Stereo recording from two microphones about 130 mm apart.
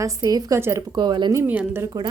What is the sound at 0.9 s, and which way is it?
Speech, 35° right (ahead or behind).